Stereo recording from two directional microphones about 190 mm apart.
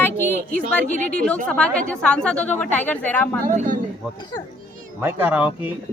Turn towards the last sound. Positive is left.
turn(degrees=-10)  # may be behind; listen again after turning